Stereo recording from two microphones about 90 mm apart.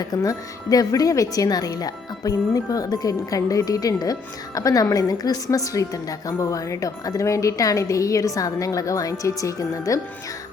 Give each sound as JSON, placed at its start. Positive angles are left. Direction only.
{"t": 0.0, "sound": "a woman's voice", "side_deg": 45}